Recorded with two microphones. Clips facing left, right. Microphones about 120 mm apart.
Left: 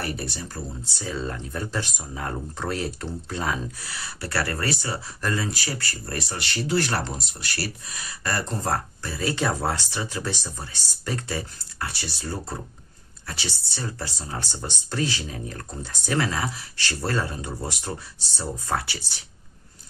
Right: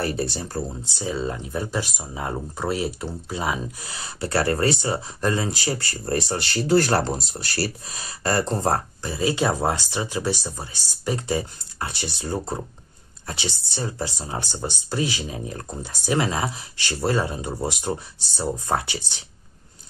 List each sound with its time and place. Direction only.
0.0 s speech: 30° right (ahead or behind)
0.8 s speech: 15° right (ahead or behind)
3.8 s speech: 20° right (ahead or behind)